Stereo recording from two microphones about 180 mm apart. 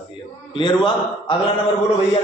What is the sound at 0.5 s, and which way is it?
Speech, 25° left (ahead or behind).